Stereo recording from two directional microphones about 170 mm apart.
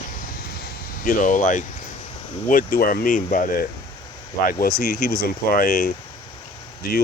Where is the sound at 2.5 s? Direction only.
60° left (ahead or behind).